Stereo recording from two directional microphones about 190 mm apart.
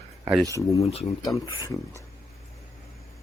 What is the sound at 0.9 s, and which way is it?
Speech, 30° left (ahead or behind).